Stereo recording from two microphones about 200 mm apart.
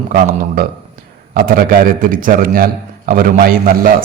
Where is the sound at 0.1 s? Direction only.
50° right (ahead or behind).